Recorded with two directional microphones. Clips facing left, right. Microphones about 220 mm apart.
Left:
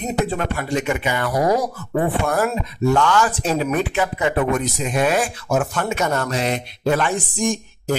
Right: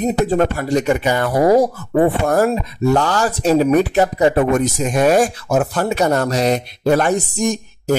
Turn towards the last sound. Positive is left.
turn(degrees=-40)  # may be behind; listen again after turning